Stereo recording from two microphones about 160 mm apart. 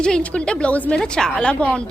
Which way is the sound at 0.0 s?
5° left (ahead or behind).